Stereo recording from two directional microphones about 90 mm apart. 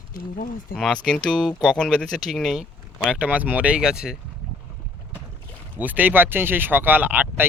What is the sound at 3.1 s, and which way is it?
Speech, 15° right (ahead or behind).